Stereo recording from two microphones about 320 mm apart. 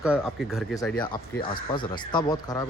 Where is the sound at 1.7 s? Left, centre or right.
Centre.